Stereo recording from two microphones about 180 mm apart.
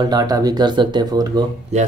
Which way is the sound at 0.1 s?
20° right (ahead or behind).